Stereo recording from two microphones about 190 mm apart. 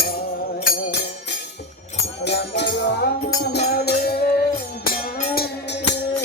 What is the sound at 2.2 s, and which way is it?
Music, 65° left (ahead or behind).